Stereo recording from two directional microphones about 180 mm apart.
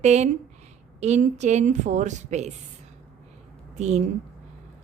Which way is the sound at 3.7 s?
40° right (ahead or behind).